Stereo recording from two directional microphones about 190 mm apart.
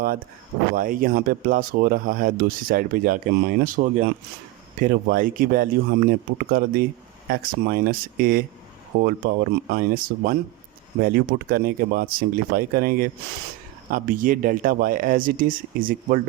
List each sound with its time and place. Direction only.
0.8 s speech: 45° right (ahead or behind)